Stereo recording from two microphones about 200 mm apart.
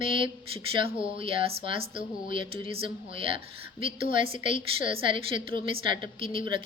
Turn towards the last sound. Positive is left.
turn(degrees=-25)  # may be behind; listen again after turning